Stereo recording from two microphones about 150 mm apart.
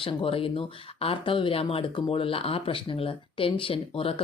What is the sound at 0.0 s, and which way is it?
Speech, 35° left (ahead or behind).